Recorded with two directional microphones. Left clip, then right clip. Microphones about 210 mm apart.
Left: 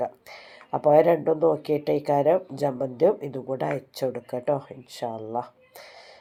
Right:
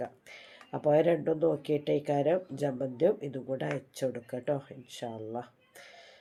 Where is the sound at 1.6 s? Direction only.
5° left (ahead or behind).